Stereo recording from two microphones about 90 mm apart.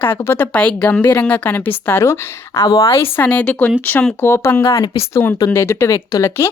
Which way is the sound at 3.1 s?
15° left (ahead or behind).